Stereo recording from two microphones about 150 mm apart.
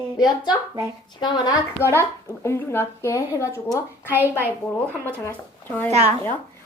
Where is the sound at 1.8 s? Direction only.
15° left (ahead or behind).